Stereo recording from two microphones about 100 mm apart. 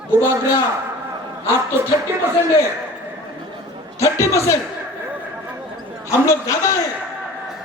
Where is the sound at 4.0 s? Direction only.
30° left (ahead or behind).